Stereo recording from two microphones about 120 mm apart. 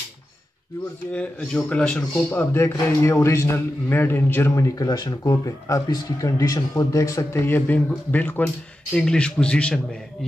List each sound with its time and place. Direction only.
1.1 s speech: 10° left (ahead or behind)
2.3 s a man's voice: 20° left (ahead or behind)